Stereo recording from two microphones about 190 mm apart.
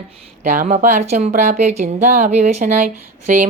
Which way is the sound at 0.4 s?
45° right (ahead or behind).